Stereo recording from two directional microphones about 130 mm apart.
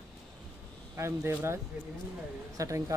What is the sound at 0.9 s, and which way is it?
Speech, 20° right (ahead or behind).